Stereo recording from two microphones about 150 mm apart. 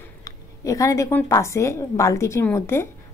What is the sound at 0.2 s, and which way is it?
A woman's voice, 20° left (ahead or behind).